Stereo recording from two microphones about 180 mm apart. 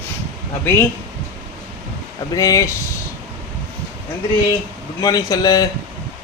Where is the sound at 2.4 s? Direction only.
20° left (ahead or behind).